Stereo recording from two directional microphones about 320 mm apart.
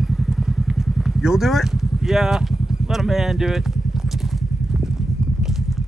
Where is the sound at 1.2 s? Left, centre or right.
Centre.